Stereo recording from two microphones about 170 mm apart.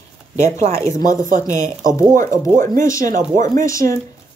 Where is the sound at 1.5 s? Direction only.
50° right (ahead or behind).